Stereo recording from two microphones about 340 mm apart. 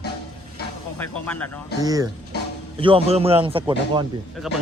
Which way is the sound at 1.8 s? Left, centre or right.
Centre.